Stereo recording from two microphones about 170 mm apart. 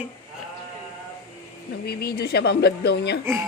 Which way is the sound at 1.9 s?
70° left (ahead or behind).